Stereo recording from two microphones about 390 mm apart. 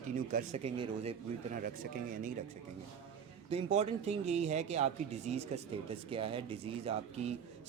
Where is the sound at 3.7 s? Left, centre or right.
Centre.